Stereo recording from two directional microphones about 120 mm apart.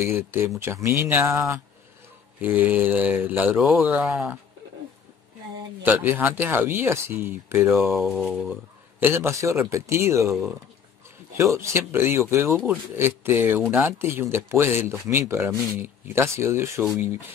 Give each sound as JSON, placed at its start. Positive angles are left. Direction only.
{"t": 0.0, "sound": "speech", "side_deg": -20}
{"t": 5.9, "sound": "speech", "side_deg": -15}
{"t": 7.9, "sound": "speech", "side_deg": 0}
{"t": 9.0, "sound": "speech", "side_deg": -20}
{"t": 11.3, "sound": "speech", "side_deg": -25}